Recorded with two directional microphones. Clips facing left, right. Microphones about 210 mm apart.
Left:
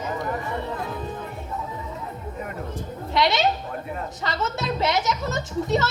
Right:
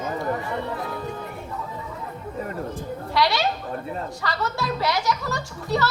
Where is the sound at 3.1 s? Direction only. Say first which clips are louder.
Left 1 dB; 20° left (ahead or behind).